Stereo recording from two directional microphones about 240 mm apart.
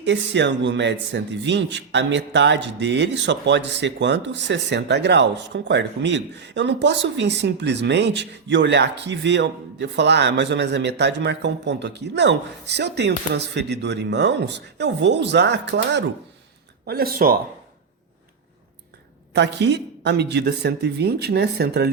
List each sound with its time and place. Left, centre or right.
0.0 s a man's voice: right
19.3 s a man's voice: right